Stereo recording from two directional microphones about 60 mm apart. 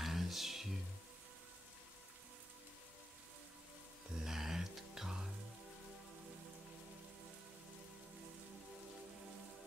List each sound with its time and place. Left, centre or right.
0.0 s music: centre
4.2 s music: centre